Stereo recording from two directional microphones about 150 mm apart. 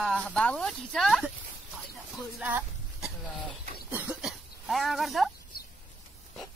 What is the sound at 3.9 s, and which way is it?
Throat clearing, 10° right (ahead or behind).